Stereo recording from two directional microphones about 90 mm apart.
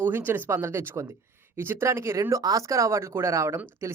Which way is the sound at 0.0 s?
25° right (ahead or behind).